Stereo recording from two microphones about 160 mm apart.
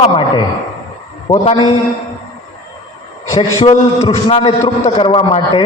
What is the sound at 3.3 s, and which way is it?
A man's voice, 35° left (ahead or behind).